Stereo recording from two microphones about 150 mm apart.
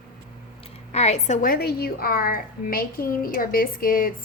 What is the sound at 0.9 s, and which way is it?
A woman's voice, 45° left (ahead or behind).